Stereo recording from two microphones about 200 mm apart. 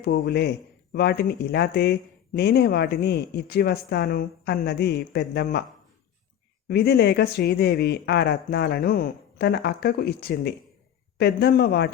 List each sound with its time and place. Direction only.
0.0 s speech: 50° left (ahead or behind)
6.7 s speech: 55° left (ahead or behind)